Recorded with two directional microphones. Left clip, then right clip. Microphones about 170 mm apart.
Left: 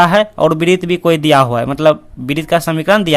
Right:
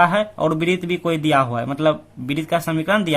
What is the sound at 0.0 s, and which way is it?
A man's voice, 30° left (ahead or behind).